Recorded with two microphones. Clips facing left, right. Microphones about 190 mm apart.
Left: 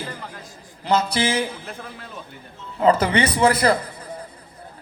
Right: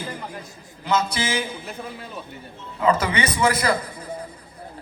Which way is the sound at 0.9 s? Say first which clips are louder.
Left 2 dB; 35° left (ahead or behind).